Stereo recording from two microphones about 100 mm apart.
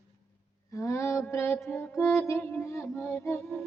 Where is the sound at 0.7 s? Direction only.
30° left (ahead or behind).